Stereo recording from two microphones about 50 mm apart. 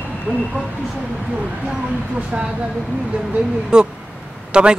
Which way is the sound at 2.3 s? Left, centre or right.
Right.